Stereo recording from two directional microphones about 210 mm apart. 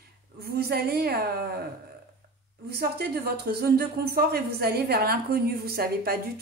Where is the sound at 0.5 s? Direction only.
50° right (ahead or behind).